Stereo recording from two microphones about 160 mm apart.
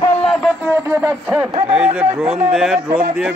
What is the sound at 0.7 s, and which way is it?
Speech, 20° right (ahead or behind).